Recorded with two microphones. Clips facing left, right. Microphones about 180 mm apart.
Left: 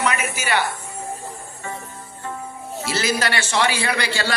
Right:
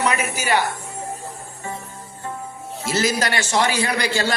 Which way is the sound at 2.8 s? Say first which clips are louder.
Right 2 dB; 45° right (ahead or behind).